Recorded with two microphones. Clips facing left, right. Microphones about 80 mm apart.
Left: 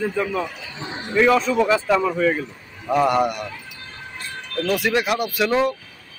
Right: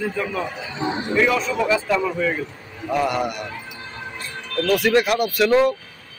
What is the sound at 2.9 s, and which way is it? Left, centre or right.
Speech, left.